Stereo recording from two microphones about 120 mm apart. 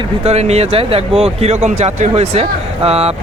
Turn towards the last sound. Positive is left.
turn(degrees=-55)  # may be behind; listen again after turning